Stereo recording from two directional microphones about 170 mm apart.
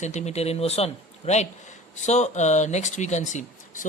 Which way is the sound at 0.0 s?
40° left (ahead or behind).